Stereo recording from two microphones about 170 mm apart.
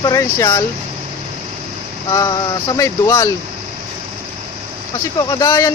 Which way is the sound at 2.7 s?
20° left (ahead or behind).